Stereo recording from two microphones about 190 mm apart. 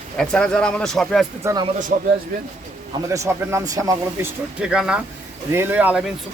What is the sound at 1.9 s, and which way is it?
Speech, 45° right (ahead or behind).